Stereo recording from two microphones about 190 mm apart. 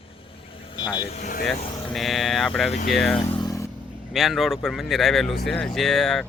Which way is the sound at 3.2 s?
25° left (ahead or behind).